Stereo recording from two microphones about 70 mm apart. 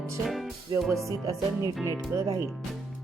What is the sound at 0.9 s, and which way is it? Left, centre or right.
Speech, right.